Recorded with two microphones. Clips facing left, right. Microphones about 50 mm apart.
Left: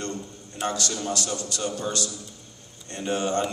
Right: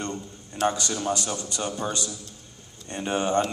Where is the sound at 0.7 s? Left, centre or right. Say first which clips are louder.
Right 2 dB; centre.